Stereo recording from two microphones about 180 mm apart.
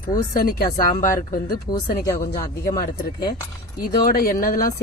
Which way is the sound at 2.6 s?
50° left (ahead or behind).